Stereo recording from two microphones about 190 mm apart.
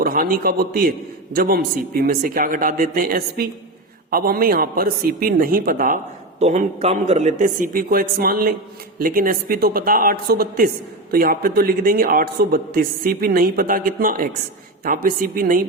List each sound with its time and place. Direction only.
0.0 s a man's voice: 50° right (ahead or behind)
6.4 s a man's voice: 35° right (ahead or behind)